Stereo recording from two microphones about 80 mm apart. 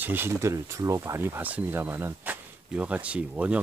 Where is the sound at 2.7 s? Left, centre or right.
Centre.